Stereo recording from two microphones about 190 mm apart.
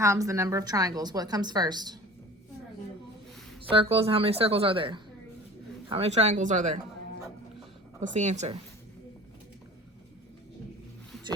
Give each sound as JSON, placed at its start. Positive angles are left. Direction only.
{"t": 0.0, "sound": "a woman's voice", "side_deg": -15}
{"t": 3.6, "sound": "a woman's voice", "side_deg": -30}
{"t": 8.0, "sound": "speech", "side_deg": -40}